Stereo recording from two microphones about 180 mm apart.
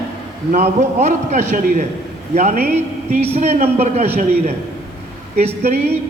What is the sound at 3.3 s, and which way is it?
Speech, 40° right (ahead or behind).